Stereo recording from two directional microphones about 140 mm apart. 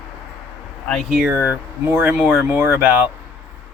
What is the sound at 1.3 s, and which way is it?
Speech, 10° right (ahead or behind).